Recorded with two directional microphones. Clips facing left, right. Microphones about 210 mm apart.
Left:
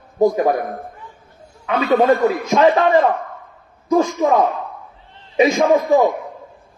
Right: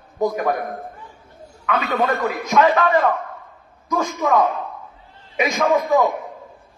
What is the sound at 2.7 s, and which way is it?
A man's voice, 30° left (ahead or behind).